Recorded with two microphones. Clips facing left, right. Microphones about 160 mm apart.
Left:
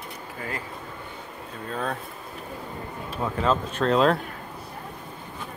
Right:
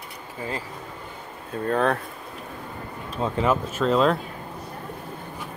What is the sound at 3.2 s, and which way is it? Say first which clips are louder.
Speech: right 2 dB; 20° right (ahead or behind).